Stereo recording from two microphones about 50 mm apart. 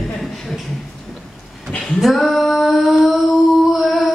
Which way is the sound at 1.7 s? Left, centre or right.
Centre.